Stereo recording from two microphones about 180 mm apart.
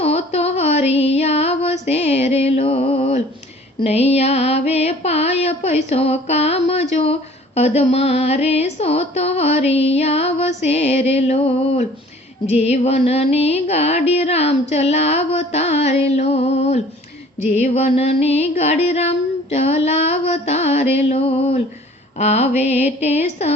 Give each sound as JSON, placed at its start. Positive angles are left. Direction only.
{"t": 0.0, "sound": "a sound", "side_deg": 35}
{"t": 0.9, "sound": "music", "side_deg": 35}
{"t": 6.9, "sound": "female singing", "side_deg": 35}